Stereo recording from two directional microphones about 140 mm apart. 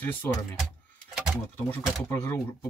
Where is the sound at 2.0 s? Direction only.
15° left (ahead or behind).